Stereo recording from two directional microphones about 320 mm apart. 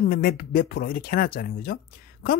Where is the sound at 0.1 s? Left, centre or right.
Left.